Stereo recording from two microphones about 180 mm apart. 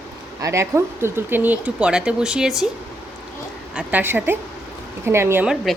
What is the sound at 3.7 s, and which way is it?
Speech, 5° right (ahead or behind).